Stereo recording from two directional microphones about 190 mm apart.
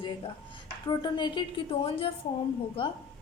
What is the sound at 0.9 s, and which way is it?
A woman's voice, 25° left (ahead or behind).